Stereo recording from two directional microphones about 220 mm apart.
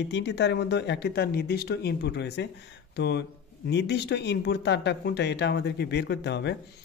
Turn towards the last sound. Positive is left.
turn(degrees=50)  # may be behind; listen again after turning